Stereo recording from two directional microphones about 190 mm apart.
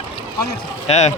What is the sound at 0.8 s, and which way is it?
Speech, 35° left (ahead or behind).